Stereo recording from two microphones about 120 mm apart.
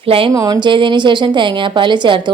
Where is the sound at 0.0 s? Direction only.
50° right (ahead or behind).